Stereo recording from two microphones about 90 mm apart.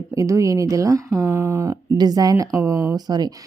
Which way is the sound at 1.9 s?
45° right (ahead or behind).